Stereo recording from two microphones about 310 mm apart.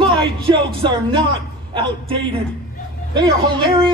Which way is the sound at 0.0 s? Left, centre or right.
Centre.